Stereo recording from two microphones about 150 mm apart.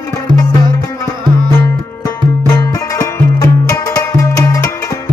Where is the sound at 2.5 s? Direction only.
20° left (ahead or behind).